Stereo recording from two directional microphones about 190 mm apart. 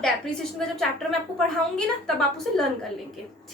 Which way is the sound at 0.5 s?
Centre (ahead or behind).